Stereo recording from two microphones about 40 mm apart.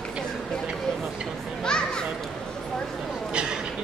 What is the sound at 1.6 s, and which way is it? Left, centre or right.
Children playing, left.